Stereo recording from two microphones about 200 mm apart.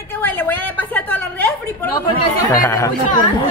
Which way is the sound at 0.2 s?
10° left (ahead or behind).